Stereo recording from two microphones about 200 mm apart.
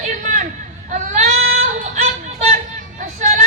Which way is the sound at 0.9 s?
40° right (ahead or behind).